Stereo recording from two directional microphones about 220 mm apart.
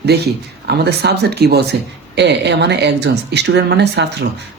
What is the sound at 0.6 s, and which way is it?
Speech, 50° right (ahead or behind).